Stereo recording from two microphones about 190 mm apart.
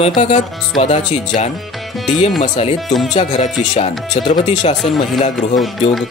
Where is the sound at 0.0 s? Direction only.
30° left (ahead or behind).